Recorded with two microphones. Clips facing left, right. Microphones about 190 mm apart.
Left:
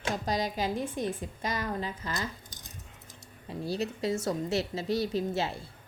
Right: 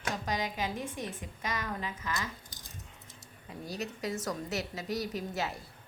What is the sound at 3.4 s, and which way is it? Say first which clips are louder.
A woman's voice: left 6 dB; 30° left (ahead or behind).